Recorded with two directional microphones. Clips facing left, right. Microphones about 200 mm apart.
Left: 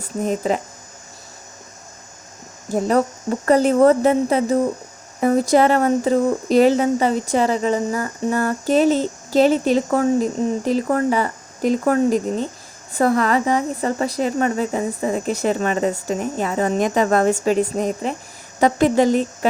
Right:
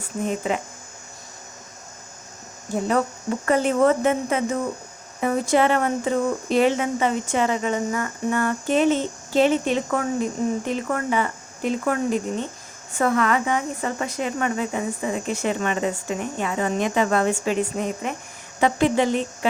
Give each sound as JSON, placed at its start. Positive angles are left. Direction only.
{"t": 0.2, "sound": "speech", "side_deg": 40}
{"t": 2.7, "sound": "speech", "side_deg": 40}